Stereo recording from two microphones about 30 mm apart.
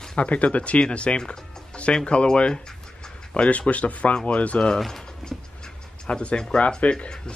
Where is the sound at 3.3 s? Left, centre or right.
Left.